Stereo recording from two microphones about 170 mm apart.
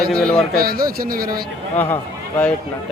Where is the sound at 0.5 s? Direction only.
60° right (ahead or behind).